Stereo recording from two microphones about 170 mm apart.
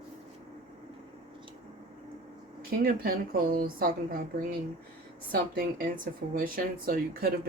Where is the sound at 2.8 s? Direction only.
60° right (ahead or behind).